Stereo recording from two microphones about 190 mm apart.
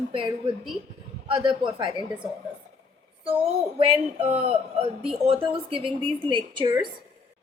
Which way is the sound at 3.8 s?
30° right (ahead or behind).